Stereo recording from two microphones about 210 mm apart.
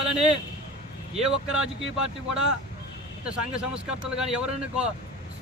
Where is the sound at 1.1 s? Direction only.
5° right (ahead or behind).